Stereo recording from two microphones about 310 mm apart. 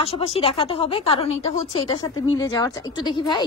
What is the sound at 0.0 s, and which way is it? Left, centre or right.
A woman's voice, centre.